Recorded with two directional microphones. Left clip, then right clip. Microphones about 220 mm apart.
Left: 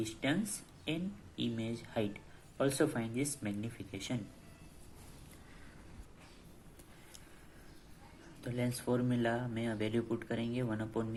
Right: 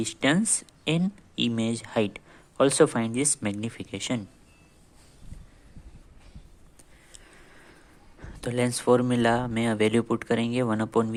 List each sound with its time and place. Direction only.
0.0 s speech: 45° right (ahead or behind)
8.4 s speech: 45° right (ahead or behind)